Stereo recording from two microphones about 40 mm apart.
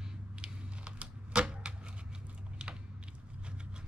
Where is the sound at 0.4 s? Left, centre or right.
Right.